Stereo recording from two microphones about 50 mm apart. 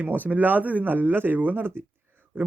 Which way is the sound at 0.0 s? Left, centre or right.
Right.